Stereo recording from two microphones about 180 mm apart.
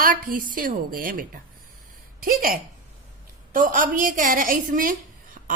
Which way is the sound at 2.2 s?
50° right (ahead or behind).